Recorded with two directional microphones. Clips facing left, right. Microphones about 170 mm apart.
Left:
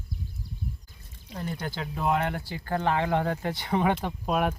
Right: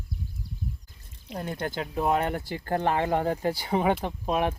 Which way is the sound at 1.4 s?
50° right (ahead or behind).